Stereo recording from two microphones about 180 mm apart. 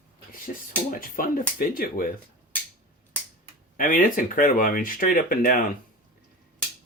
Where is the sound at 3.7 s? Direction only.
50° left (ahead or behind).